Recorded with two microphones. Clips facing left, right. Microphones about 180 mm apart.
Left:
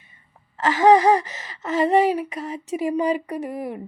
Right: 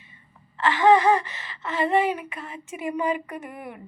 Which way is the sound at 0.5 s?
40° left (ahead or behind).